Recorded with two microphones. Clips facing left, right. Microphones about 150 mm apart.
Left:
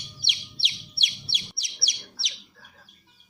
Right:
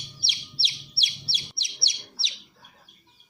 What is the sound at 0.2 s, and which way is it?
Bird, 35° right (ahead or behind).